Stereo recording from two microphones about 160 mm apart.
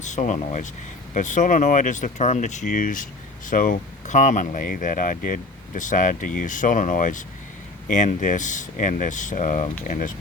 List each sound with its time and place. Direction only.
0.0 s speech: 50° left (ahead or behind)